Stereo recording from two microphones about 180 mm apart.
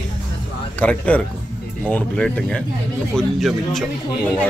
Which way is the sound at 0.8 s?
5° left (ahead or behind).